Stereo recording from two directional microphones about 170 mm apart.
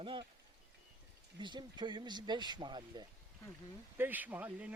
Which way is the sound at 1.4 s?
25° right (ahead or behind).